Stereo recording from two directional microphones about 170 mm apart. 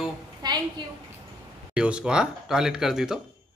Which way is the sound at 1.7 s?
5° right (ahead or behind).